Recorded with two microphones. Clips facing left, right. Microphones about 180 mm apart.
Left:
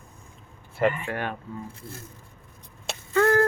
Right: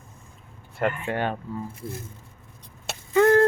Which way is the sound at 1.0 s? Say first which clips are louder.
Right 4 dB; 25° right (ahead or behind).